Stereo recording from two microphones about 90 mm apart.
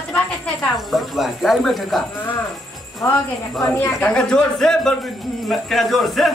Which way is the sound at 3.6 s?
20° left (ahead or behind).